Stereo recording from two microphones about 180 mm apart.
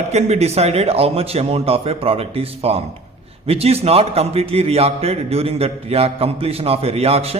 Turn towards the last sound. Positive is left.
turn(degrees=-35)  # may be behind; listen again after turning